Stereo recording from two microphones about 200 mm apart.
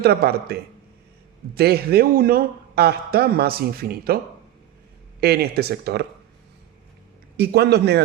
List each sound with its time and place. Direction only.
0.0 s a man's voice: 50° right (ahead or behind)
5.2 s a man's voice: 50° right (ahead or behind)
7.3 s a man's voice: 55° right (ahead or behind)